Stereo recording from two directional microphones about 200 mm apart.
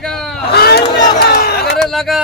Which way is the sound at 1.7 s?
Centre (ahead or behind).